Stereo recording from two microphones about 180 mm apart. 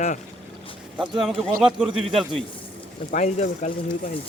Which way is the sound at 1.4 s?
Centre (ahead or behind).